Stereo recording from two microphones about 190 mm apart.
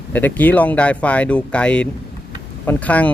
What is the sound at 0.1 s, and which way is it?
Speech, 10° left (ahead or behind).